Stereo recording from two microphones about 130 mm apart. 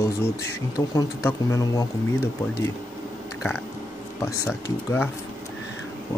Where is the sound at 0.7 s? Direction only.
25° left (ahead or behind).